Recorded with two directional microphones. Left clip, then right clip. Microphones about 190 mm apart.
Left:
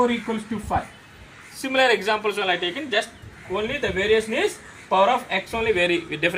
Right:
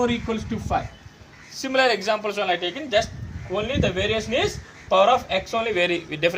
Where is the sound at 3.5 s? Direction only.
30° right (ahead or behind).